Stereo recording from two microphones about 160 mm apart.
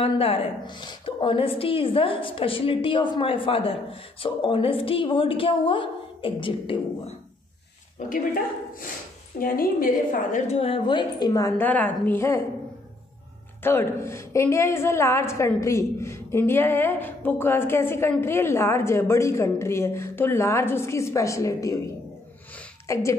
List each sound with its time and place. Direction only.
0.0 s a woman's voice: 35° left (ahead or behind)
9.4 s a woman's voice: 65° left (ahead or behind)
10.3 s a woman's voice: 45° left (ahead or behind); by 12.4 s 15° left (ahead or behind)
13.6 s a woman's voice: 15° left (ahead or behind)
22.9 s a woman's voice: 20° left (ahead or behind)